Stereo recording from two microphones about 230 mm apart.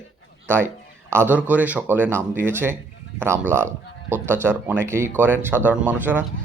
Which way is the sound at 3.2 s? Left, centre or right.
Centre.